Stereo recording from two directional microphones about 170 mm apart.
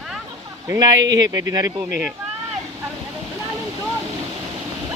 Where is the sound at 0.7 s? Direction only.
25° right (ahead or behind).